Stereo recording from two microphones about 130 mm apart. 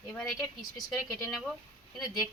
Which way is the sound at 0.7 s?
20° left (ahead or behind).